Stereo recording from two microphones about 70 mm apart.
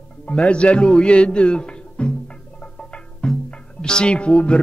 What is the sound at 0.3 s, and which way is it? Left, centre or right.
Speech, centre.